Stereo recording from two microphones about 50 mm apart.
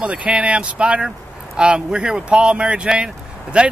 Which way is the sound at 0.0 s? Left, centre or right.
Right.